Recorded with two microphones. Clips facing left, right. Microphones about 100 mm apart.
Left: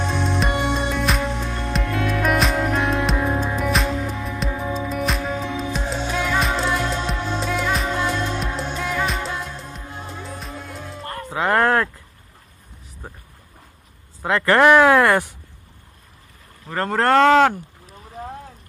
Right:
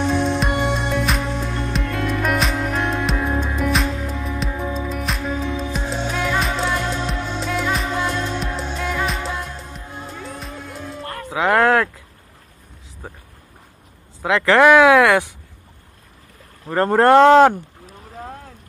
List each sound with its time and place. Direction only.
0.1 s music: centre (ahead or behind)
11.2 s a sound: 15° right (ahead or behind)
14.6 s speech: 5° right (ahead or behind)
16.7 s speech: 20° right (ahead or behind)